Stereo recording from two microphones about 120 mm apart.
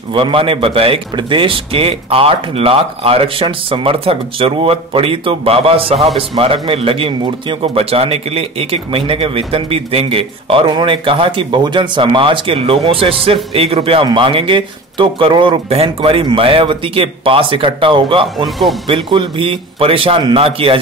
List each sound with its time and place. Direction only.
0.1 s a man's voice: 45° right (ahead or behind)